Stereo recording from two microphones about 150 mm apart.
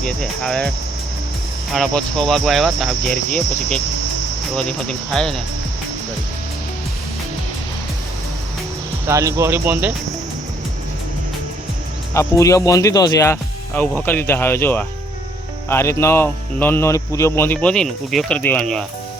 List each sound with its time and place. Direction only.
0.0 s speech: 5° left (ahead or behind)
1.7 s speech: 5° left (ahead or behind)
9.0 s speech: 20° right (ahead or behind)
12.1 s speech: 20° left (ahead or behind); by 18.9 s 5° left (ahead or behind)